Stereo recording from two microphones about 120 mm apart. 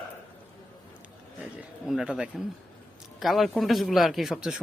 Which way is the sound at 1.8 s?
5° right (ahead or behind).